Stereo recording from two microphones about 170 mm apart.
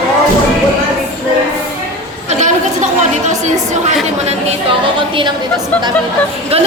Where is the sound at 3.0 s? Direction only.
45° right (ahead or behind).